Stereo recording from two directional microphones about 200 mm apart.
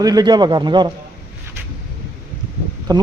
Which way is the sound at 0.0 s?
20° right (ahead or behind).